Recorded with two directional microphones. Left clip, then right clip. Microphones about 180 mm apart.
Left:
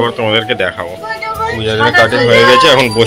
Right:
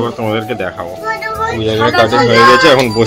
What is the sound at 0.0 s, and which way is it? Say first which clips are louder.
Speech: left 4 dB; 5° left (ahead or behind).